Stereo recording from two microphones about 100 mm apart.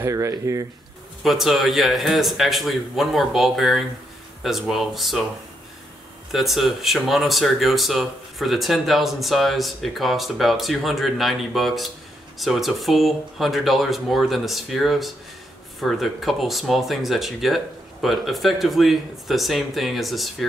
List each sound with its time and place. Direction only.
0.0 s speech: 30° right (ahead or behind)
1.2 s speech: centre (ahead or behind)
6.3 s speech: centre (ahead or behind)